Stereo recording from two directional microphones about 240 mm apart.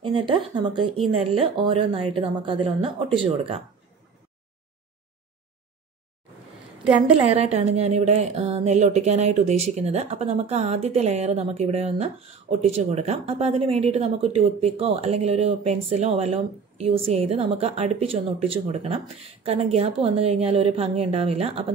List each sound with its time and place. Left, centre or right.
0.0 s a woman's voice: right
7.2 s a woman's voice: right